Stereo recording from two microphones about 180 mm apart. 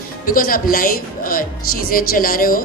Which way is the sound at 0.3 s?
50° left (ahead or behind).